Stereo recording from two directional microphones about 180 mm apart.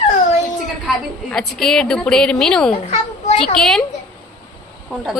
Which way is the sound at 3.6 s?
Centre (ahead or behind).